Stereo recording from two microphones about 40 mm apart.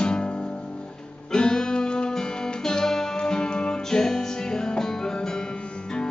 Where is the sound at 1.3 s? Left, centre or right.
Centre.